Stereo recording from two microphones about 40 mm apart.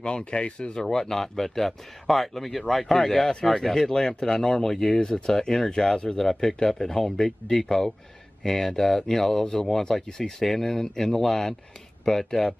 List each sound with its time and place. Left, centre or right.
0.0 s speech: left
0.8 s speech: centre